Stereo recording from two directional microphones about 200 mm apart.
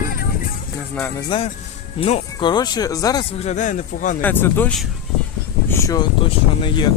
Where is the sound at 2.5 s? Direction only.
20° left (ahead or behind); by 4.1 s 40° left (ahead or behind).